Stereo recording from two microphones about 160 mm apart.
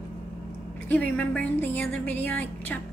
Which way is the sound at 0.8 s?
10° left (ahead or behind).